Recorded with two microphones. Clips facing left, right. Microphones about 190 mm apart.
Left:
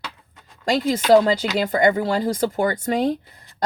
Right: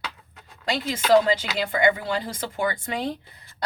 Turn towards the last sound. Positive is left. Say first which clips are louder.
# left 6 dB
turn(degrees=45)  # may be behind; listen again after turning